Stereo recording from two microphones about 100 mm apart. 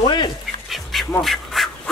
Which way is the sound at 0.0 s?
50° left (ahead or behind).